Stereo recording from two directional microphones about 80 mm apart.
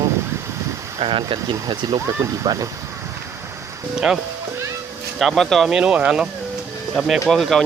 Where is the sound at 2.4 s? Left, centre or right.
Right.